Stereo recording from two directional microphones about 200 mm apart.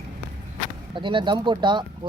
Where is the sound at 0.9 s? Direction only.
25° right (ahead or behind).